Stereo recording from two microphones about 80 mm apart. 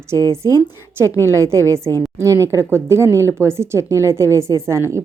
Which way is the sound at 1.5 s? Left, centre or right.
Right.